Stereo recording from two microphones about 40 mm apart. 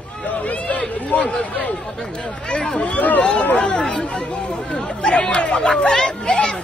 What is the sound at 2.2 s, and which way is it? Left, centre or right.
Speech, centre.